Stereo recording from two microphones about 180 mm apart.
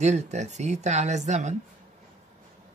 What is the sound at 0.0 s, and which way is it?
Speech, 40° right (ahead or behind).